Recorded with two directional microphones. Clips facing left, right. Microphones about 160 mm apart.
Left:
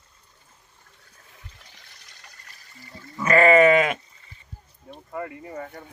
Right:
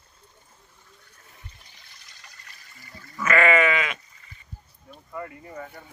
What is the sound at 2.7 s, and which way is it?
Sheep, 30° left (ahead or behind).